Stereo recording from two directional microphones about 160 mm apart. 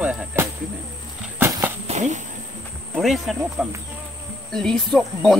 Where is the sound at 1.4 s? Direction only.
20° right (ahead or behind).